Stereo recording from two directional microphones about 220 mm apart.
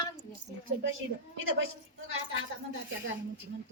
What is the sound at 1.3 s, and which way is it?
Speech, 65° right (ahead or behind).